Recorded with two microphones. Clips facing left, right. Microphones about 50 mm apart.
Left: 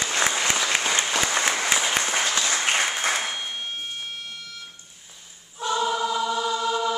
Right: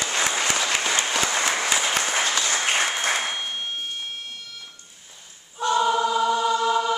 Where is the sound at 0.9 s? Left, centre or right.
Centre.